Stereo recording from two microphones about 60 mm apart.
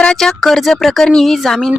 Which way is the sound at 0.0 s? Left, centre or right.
Centre.